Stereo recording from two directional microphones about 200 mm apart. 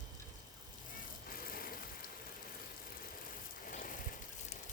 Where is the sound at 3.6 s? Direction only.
40° left (ahead or behind).